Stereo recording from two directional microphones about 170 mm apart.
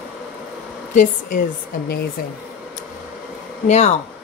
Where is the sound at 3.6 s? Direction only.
40° left (ahead or behind).